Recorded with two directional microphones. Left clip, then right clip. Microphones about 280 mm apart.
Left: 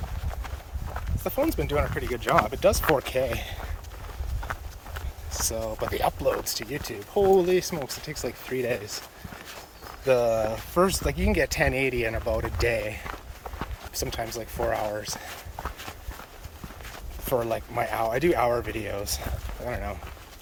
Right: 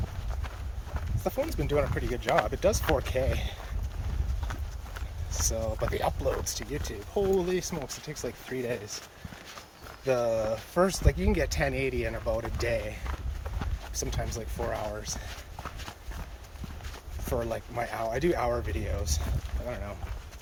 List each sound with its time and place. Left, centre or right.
1.2 s speech: centre
4.9 s a sound: centre
5.5 s speech: centre
10.1 s speech: centre
17.2 s speech: centre